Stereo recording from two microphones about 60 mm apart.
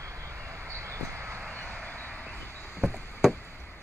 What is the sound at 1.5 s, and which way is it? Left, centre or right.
Vehicle, left.